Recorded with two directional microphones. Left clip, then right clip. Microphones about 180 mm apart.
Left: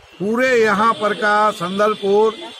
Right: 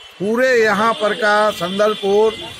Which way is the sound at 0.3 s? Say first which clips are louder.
Right 1 dB; 25° left (ahead or behind).